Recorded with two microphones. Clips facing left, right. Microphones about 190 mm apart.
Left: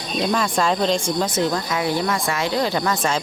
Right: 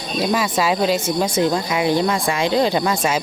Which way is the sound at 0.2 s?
5° right (ahead or behind).